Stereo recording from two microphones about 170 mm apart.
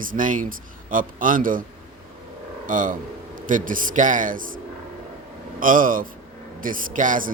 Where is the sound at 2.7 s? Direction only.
50° right (ahead or behind).